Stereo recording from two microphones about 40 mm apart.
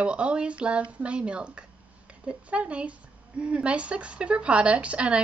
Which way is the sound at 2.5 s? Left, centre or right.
Right.